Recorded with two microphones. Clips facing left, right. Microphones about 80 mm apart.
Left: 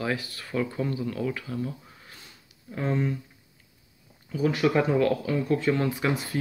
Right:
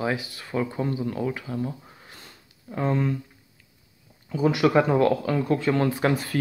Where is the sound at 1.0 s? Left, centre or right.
Right.